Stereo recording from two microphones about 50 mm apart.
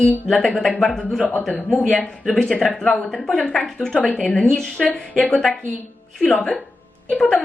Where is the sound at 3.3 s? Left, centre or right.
Left.